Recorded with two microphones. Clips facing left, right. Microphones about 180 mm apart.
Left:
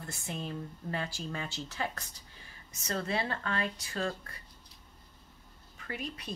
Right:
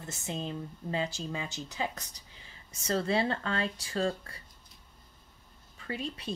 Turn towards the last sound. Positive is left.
turn(degrees=-30)  # may be behind; listen again after turning